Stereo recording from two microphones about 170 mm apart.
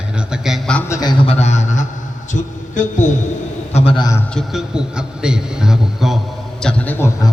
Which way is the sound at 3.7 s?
30° left (ahead or behind).